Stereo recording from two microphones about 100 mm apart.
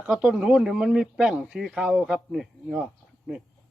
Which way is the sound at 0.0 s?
10° right (ahead or behind).